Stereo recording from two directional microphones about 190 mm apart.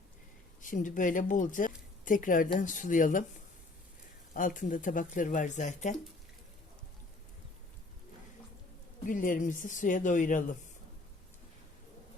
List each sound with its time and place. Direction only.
0.6 s speech: 45° left (ahead or behind)
4.4 s speech: 45° left (ahead or behind)
9.0 s speech: 45° left (ahead or behind)